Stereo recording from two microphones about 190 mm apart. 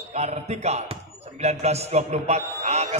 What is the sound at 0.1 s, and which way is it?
A man's voice, 35° right (ahead or behind).